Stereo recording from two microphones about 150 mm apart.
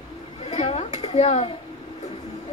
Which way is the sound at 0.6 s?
40° left (ahead or behind).